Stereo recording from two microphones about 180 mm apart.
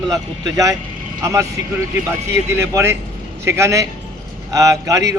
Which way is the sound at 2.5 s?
15° right (ahead or behind).